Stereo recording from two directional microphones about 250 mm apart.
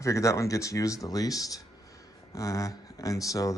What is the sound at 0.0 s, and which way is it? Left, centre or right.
Speech, centre.